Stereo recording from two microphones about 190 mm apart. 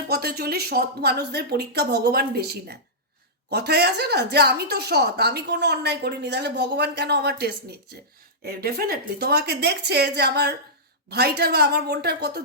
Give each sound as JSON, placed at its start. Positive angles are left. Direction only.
{"t": 0.1, "sound": "speech", "side_deg": -55}